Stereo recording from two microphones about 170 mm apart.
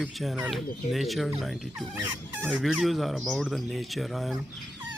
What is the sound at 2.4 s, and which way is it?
Speech, centre (ahead or behind).